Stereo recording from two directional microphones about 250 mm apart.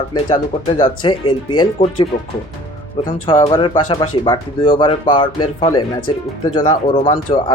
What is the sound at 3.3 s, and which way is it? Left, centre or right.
Speech, centre.